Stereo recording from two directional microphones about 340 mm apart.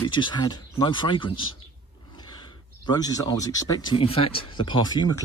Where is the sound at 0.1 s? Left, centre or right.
Centre.